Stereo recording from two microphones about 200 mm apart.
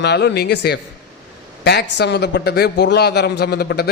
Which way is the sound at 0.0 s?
55° left (ahead or behind).